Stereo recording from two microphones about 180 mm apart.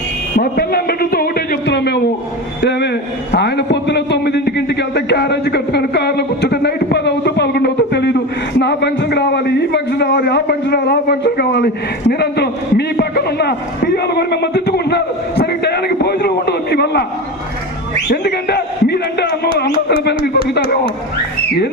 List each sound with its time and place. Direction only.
0.3 s music: 55° left (ahead or behind)
2.6 s a man's voice: 70° left (ahead or behind)
18.1 s a man's voice: 60° left (ahead or behind)